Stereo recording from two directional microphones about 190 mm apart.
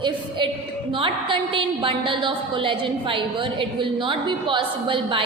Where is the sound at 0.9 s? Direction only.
25° right (ahead or behind).